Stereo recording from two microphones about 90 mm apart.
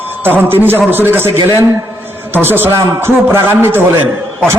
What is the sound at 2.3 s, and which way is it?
A man's voice, 25° right (ahead or behind).